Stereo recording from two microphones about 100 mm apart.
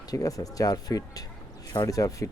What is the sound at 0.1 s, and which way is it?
Speech, 35° left (ahead or behind).